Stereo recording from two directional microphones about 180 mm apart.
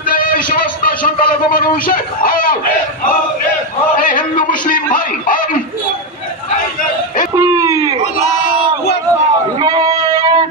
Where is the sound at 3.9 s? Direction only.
50° left (ahead or behind).